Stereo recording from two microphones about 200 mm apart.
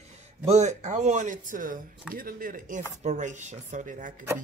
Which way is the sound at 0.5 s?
35° right (ahead or behind).